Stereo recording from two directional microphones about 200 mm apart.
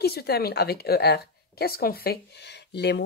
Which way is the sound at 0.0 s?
50° left (ahead or behind).